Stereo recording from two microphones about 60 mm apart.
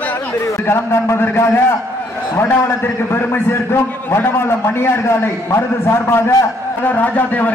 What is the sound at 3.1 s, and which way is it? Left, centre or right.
A man's voice, left.